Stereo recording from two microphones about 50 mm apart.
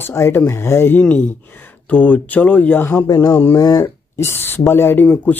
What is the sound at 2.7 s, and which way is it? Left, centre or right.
Speech, left.